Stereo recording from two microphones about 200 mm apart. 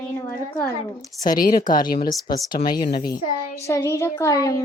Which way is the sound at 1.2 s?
45° left (ahead or behind).